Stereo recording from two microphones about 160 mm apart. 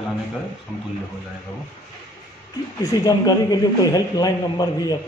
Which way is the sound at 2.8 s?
25° left (ahead or behind).